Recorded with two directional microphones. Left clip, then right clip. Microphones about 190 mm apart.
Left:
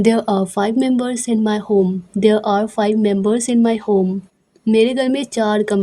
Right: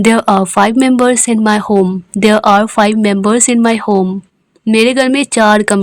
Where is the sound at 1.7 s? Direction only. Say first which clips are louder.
Right 2 dB; 65° right (ahead or behind).